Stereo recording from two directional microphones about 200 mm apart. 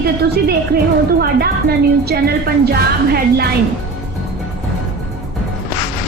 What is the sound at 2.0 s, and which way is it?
Speech, 50° right (ahead or behind).